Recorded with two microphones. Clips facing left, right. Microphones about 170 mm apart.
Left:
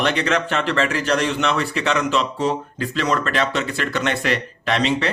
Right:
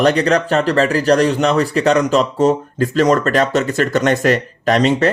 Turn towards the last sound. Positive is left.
turn(degrees=-45)  # may be behind; listen again after turning